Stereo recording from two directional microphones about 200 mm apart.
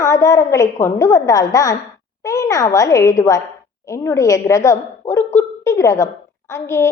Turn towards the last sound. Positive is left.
turn(degrees=15)  # may be behind; listen again after turning